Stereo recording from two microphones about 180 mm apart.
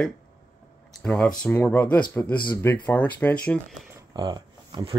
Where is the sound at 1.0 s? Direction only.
5° left (ahead or behind).